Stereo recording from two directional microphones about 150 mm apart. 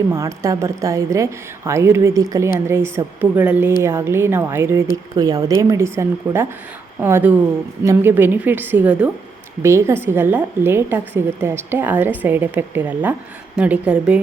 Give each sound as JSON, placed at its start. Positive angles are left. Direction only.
{"t": 0.1, "sound": "a woman's voice", "side_deg": -20}